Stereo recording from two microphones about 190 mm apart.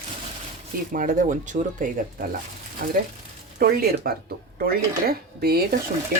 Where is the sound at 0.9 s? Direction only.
45° right (ahead or behind).